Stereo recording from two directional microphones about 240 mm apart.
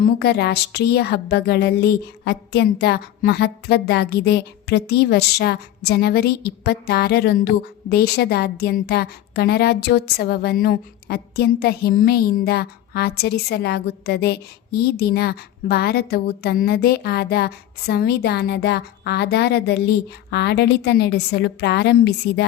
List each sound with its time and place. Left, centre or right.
0.0 s a woman's voice: left